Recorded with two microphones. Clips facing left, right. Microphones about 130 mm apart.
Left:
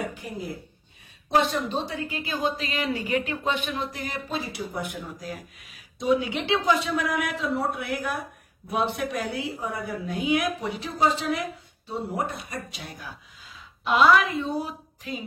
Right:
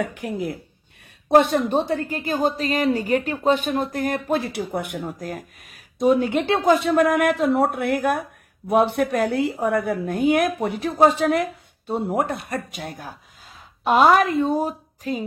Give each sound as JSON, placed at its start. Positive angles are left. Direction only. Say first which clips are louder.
{"t": 0.0, "sound": "speech", "louder": "right 7 dB", "side_deg": -75}
{"t": 1.3, "sound": "a woman's voice", "louder": "right 7 dB", "side_deg": -55}